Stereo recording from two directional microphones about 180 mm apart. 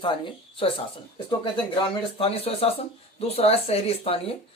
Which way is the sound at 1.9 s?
30° left (ahead or behind).